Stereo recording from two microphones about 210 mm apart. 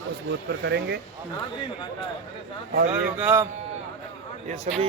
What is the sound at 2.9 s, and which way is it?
Speech, 10° right (ahead or behind).